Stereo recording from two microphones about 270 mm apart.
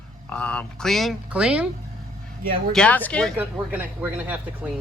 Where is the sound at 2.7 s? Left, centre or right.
Centre.